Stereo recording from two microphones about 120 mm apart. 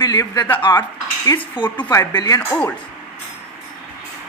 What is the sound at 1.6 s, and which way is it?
Speech, 10° right (ahead or behind).